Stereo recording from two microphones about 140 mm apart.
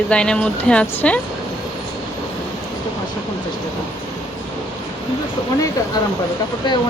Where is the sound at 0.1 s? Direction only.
10° left (ahead or behind).